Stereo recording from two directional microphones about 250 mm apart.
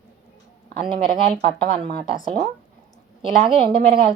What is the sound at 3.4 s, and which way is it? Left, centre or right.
Speech, centre.